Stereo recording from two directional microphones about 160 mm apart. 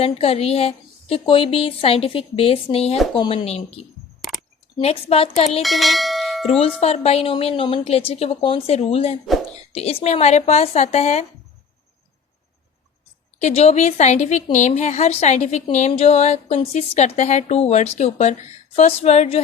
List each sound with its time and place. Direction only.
0.0 s a woman's voice: 40° left (ahead or behind)
4.8 s a woman's voice: 40° left (ahead or behind)
5.6 s bell: centre (ahead or behind)
6.6 s a woman's voice: 40° left (ahead or behind)
13.4 s speech: 40° left (ahead or behind)